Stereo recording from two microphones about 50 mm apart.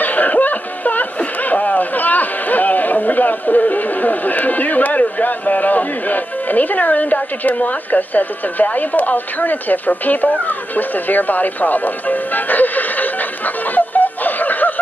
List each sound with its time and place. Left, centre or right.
0.0 s speech: left
13.7 s snicker: left